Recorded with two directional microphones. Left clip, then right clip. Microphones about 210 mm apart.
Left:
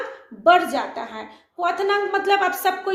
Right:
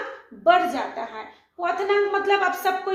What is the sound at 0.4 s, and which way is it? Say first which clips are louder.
A woman's voice: left 2 dB; 45° left (ahead or behind).